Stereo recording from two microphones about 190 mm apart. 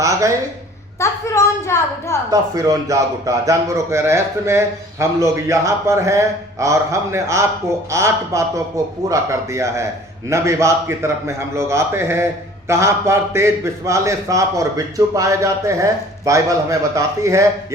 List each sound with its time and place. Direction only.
0.0 s a man's voice: 15° right (ahead or behind)
0.9 s a woman's voice: 15° left (ahead or behind)
2.3 s a man's voice: 15° right (ahead or behind)